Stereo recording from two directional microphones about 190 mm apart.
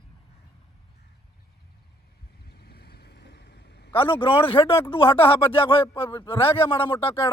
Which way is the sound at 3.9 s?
25° left (ahead or behind).